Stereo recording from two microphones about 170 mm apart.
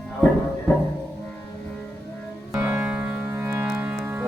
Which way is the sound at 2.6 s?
5° right (ahead or behind).